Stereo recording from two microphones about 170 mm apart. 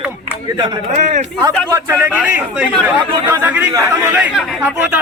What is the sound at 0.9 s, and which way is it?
Speech, 45° right (ahead or behind).